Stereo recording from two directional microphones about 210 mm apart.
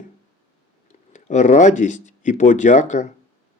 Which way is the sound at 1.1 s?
35° left (ahead or behind).